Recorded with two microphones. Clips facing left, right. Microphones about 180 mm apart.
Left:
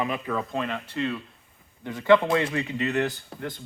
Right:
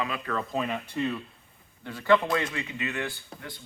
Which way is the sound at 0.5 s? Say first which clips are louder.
Even; 10° right (ahead or behind).